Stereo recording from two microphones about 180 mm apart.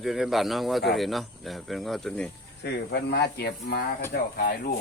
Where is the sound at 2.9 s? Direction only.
65° left (ahead or behind).